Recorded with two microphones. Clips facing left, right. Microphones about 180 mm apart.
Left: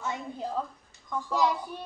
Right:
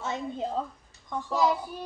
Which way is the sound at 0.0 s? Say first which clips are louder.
Right 3 dB; 20° right (ahead or behind).